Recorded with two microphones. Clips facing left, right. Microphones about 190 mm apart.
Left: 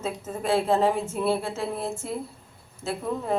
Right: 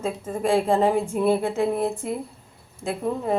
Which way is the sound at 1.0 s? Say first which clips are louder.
Right 4 dB; 15° right (ahead or behind).